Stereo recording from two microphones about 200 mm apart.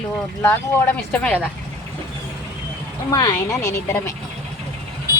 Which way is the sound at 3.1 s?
20° left (ahead or behind).